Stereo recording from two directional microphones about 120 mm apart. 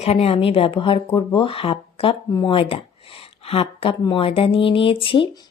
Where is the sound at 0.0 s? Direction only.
60° left (ahead or behind).